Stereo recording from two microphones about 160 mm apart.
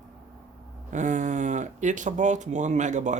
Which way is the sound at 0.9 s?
50° right (ahead or behind).